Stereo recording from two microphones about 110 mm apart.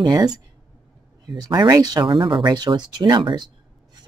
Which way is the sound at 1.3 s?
40° right (ahead or behind).